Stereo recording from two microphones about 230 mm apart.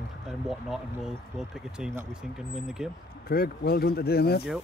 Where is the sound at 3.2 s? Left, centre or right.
Left.